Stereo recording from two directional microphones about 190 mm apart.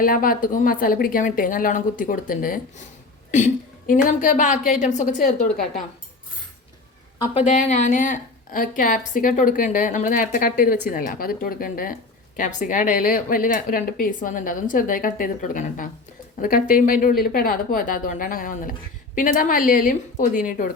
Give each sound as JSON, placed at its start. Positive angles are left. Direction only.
{"t": 0.0, "sound": "a woman's voice", "side_deg": 45}
{"t": 7.3, "sound": "speech", "side_deg": 40}